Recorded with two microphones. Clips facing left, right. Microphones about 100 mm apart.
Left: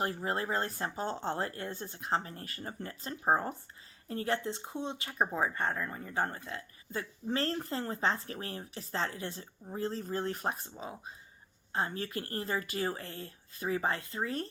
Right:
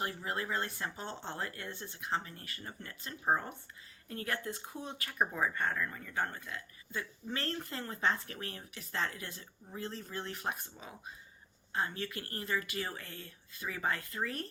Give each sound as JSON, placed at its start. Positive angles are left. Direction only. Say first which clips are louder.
{"t": 0.0, "sound": "speech", "louder": "left 4 dB", "side_deg": 40}